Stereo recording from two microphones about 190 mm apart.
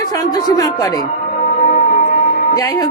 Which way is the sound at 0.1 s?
20° left (ahead or behind).